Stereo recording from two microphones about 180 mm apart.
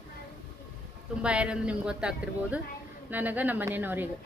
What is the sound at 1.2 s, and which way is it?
A woman's voice, 5° right (ahead or behind).